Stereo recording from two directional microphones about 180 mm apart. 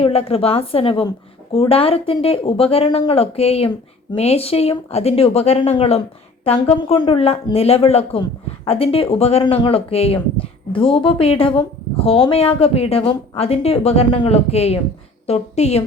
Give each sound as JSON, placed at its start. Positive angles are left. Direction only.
{"t": 0.0, "sound": "a woman's voice", "side_deg": 35}